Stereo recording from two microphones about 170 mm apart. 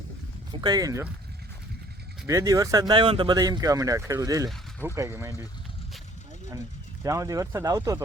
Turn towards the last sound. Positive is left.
turn(degrees=-20)  # may be behind; listen again after turning